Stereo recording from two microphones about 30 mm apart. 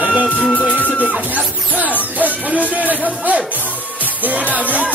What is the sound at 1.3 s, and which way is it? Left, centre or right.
Music, right.